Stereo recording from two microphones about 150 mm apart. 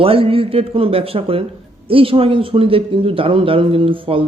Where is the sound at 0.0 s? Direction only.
40° right (ahead or behind).